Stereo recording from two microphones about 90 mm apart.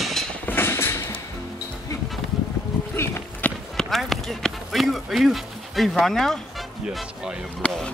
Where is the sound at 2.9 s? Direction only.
25° left (ahead or behind).